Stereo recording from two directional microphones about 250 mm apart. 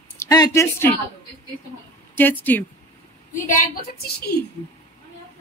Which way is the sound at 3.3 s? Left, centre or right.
Left.